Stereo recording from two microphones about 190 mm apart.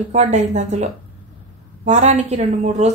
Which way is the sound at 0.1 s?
35° right (ahead or behind).